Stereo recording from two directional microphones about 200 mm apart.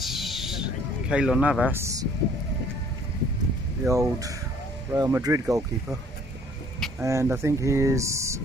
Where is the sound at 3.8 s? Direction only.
15° right (ahead or behind).